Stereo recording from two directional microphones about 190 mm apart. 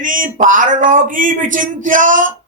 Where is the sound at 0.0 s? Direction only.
45° right (ahead or behind).